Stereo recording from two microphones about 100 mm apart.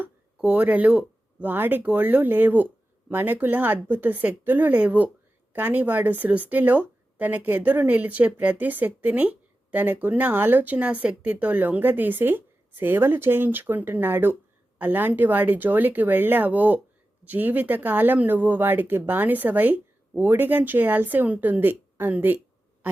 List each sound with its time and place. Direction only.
0.3 s speech: 15° right (ahead or behind)